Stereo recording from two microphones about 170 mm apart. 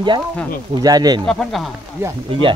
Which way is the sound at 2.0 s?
15° right (ahead or behind).